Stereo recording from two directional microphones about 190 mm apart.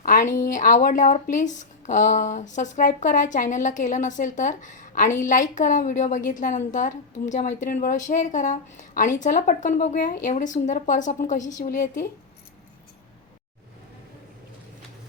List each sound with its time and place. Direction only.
0.0 s speech: 45° left (ahead or behind)